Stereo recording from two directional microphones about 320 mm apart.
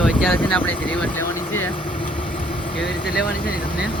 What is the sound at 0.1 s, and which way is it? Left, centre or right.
Speech, centre.